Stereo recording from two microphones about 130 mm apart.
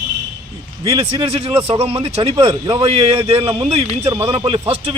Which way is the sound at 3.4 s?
20° right (ahead or behind).